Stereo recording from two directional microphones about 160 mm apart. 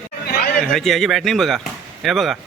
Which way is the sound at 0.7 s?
Centre (ahead or behind).